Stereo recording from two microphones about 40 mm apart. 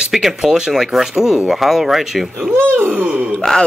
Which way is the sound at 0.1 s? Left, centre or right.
Centre.